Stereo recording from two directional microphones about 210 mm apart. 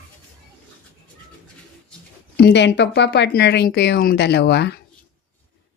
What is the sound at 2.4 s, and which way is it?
Speech, 55° left (ahead or behind).